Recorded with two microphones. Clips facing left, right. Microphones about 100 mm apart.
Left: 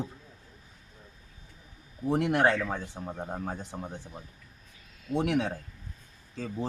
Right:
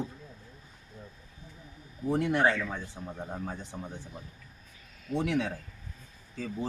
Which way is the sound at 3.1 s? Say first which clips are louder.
Left 2 dB; 35° left (ahead or behind).